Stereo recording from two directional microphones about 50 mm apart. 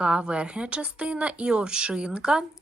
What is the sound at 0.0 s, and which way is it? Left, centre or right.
A woman's voice, centre.